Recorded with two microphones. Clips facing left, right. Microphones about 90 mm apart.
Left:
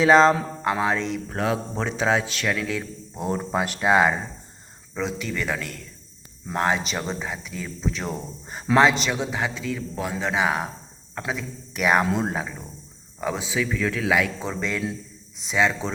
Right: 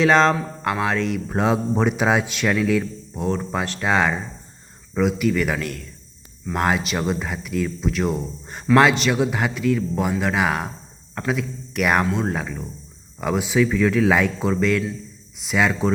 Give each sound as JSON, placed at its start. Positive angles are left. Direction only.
{"t": 0.0, "sound": "speech", "side_deg": 5}
{"t": 1.3, "sound": "speech", "side_deg": -20}
{"t": 2.6, "sound": "speech", "side_deg": -5}
{"t": 3.2, "sound": "speech", "side_deg": 10}
{"t": 4.9, "sound": "speech", "side_deg": -5}
{"t": 10.2, "sound": "speech", "side_deg": 0}
{"t": 12.0, "sound": "speech", "side_deg": 20}
{"t": 12.3, "sound": "speech", "side_deg": 5}